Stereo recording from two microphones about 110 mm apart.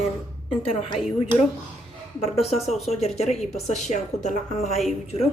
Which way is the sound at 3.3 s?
Centre (ahead or behind).